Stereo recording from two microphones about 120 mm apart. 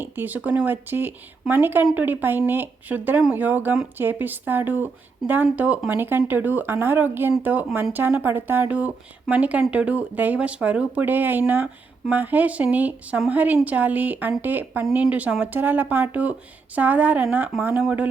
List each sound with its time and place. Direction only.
0.0 s speech: 15° right (ahead or behind)